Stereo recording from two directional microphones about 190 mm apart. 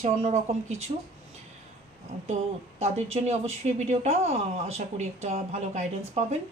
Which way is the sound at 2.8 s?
35° right (ahead or behind).